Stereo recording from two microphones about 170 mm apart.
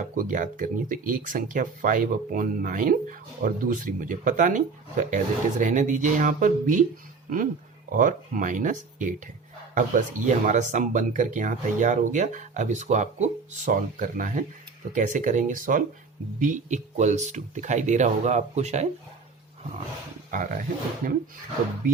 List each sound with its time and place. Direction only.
0.2 s speech: 50° right (ahead or behind)
7.9 s speech: 50° right (ahead or behind)
20.3 s speech: 50° right (ahead or behind)